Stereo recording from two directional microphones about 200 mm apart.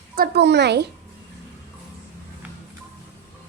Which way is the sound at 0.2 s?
55° right (ahead or behind).